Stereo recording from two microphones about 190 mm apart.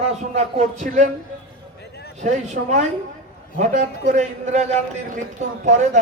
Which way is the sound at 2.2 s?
35° right (ahead or behind).